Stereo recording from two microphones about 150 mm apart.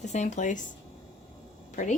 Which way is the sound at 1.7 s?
60° left (ahead or behind).